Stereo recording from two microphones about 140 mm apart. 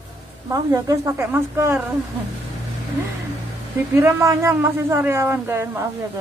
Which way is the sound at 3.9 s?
15° right (ahead or behind).